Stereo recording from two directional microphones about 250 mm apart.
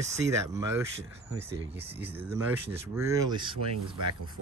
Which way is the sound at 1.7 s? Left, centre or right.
Centre.